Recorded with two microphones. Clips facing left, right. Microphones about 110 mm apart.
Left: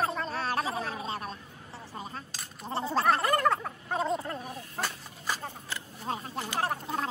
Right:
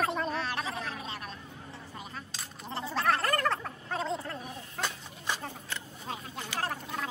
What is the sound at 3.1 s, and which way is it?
Gargling, 10° left (ahead or behind).